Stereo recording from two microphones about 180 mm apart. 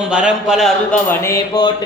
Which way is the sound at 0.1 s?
5° right (ahead or behind).